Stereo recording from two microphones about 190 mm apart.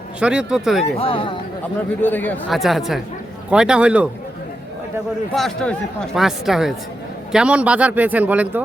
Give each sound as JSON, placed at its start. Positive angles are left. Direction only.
{"t": 0.2, "sound": "speech", "side_deg": -5}
{"t": 0.9, "sound": "speech", "side_deg": 30}
{"t": 2.0, "sound": "speech", "side_deg": 10}
{"t": 5.3, "sound": "speech", "side_deg": 0}